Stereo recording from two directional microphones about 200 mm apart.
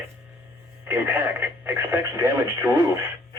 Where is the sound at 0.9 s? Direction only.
10° right (ahead or behind).